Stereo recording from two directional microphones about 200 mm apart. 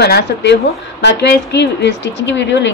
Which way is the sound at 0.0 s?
55° left (ahead or behind).